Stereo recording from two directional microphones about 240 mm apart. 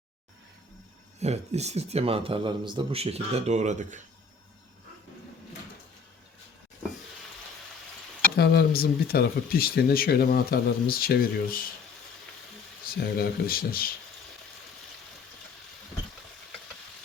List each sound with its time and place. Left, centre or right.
1.2 s a man's voice: right
8.4 s speech: left
12.8 s speech: left